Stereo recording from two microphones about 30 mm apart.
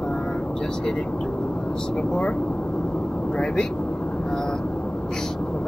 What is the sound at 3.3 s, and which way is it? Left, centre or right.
Speech, left.